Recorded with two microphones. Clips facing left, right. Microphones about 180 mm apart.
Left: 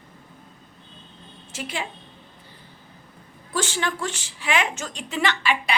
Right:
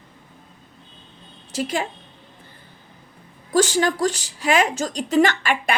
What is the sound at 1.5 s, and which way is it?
Speech, 40° right (ahead or behind).